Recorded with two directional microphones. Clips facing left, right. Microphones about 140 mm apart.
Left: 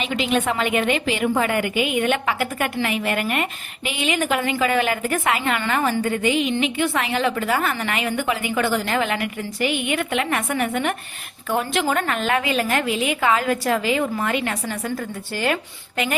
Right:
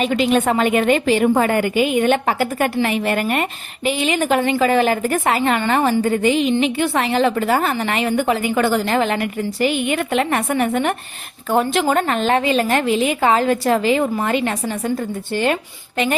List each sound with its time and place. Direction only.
0.0 s a woman's voice: 45° right (ahead or behind)